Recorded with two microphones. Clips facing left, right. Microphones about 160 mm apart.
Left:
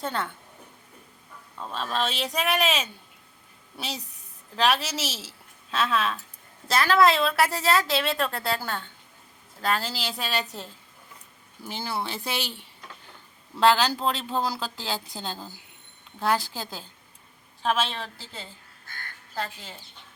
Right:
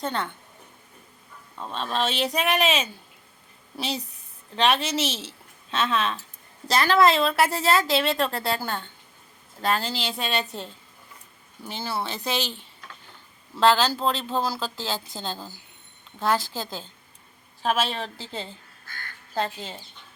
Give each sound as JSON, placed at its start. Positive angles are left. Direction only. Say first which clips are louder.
{"t": 0.0, "sound": "speech", "louder": "right 1 dB", "side_deg": 5}
{"t": 1.5, "sound": "speech", "louder": "right 1 dB", "side_deg": 0}
{"t": 8.1, "sound": "a woman's voice", "louder": "right 2 dB", "side_deg": -30}
{"t": 8.5, "sound": "speech", "louder": "right 2 dB", "side_deg": 0}
{"t": 11.6, "sound": "speech", "louder": "right 1 dB", "side_deg": 10}
{"t": 17.6, "sound": "speech", "louder": "right 1 dB", "side_deg": -5}
{"t": 18.0, "sound": "a woman's voice", "louder": "right 6 dB", "side_deg": -25}